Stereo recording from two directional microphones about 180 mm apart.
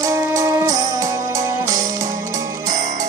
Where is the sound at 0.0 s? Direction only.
15° right (ahead or behind).